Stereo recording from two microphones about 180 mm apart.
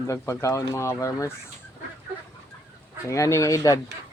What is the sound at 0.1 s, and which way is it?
Speech, 15° left (ahead or behind).